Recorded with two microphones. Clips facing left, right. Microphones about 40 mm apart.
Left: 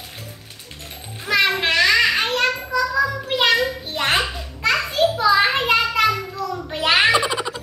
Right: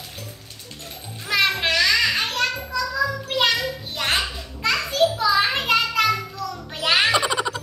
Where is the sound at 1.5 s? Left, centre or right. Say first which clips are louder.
Left 3 dB; left.